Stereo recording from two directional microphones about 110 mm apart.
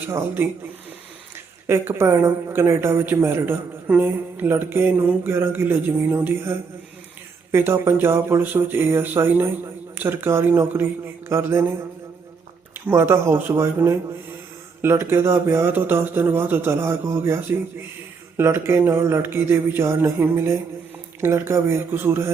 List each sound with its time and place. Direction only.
0.0 s speech: 20° right (ahead or behind)
1.6 s speech: 20° right (ahead or behind)
12.9 s speech: 25° right (ahead or behind)